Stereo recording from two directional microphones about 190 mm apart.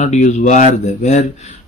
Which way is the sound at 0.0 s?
40° left (ahead or behind).